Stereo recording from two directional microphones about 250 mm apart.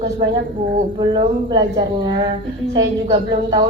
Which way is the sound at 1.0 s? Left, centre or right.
Centre.